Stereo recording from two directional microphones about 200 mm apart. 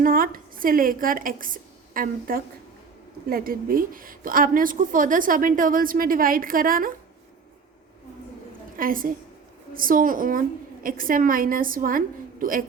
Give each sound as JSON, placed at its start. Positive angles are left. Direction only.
{"t": 0.0, "sound": "a woman's voice", "side_deg": -45}
{"t": 8.8, "sound": "a woman's voice", "side_deg": -45}